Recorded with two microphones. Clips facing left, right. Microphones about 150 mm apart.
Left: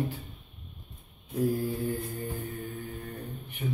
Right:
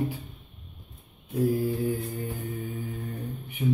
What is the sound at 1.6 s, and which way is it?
Mantra, 5° right (ahead or behind).